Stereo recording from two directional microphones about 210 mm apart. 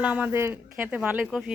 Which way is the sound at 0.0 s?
5° right (ahead or behind).